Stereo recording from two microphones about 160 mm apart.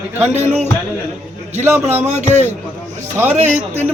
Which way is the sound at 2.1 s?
45° right (ahead or behind).